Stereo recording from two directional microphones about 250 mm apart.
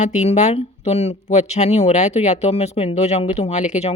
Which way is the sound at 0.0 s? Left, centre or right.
Left.